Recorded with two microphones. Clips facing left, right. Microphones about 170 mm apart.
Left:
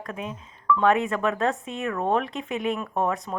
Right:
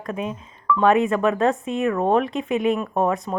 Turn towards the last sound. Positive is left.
turn(degrees=-10)  # may be behind; listen again after turning